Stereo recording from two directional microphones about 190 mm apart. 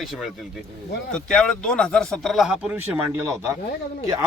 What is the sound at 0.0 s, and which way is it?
Speech, centre (ahead or behind).